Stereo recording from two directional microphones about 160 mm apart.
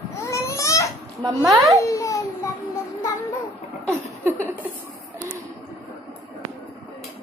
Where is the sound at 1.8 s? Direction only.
20° left (ahead or behind).